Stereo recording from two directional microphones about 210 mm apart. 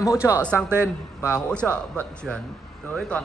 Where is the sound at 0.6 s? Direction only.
10° right (ahead or behind).